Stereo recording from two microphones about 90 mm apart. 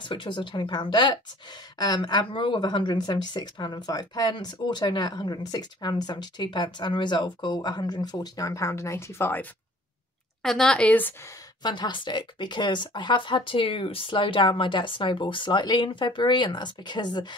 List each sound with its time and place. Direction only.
0.0 s a woman's voice: 60° left (ahead or behind); by 9.5 s 25° left (ahead or behind)
10.4 s a woman's voice: 5° left (ahead or behind)
11.6 s speech: 55° left (ahead or behind)